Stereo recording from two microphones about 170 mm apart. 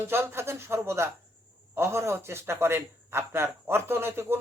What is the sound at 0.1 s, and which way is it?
A man's voice, 15° right (ahead or behind).